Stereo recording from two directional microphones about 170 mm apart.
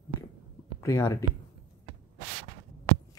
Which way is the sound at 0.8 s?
15° left (ahead or behind).